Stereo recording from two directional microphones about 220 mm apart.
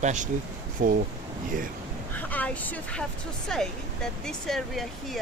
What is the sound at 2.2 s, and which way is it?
Speech, 5° left (ahead or behind).